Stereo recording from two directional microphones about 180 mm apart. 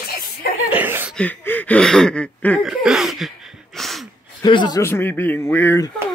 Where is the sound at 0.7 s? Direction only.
10° right (ahead or behind).